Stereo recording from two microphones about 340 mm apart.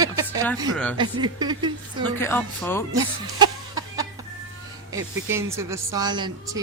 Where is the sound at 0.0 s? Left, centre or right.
Centre.